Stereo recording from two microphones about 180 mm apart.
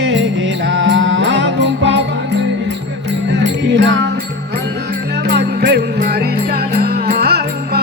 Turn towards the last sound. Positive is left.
turn(degrees=-60)  # may be behind; listen again after turning